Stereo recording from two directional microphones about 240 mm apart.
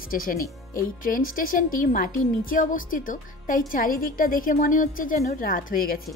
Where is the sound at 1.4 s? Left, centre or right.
Left.